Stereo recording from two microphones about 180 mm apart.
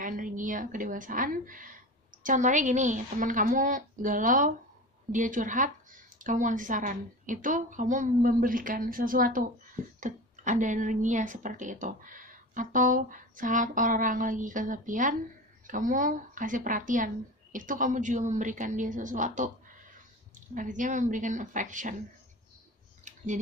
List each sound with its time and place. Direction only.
0.0 s a woman's voice: 50° right (ahead or behind)
20.5 s speech: 45° right (ahead or behind)
23.0 s a sound: 40° right (ahead or behind)